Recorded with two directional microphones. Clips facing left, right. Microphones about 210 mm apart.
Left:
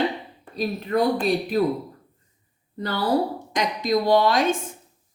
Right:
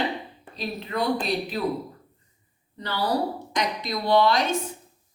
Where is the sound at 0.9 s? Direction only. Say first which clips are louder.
Left 7 dB; 45° left (ahead or behind).